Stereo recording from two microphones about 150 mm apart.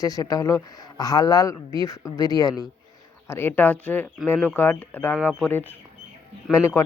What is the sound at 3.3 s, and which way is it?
Speech, 15° left (ahead or behind).